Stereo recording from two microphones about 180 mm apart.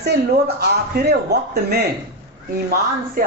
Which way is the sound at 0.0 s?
65° right (ahead or behind).